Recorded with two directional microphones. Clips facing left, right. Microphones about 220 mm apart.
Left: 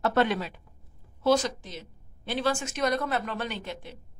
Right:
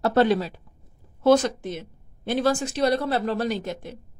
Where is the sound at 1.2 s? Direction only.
55° right (ahead or behind).